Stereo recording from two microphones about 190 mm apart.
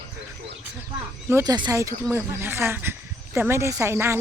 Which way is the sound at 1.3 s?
15° right (ahead or behind).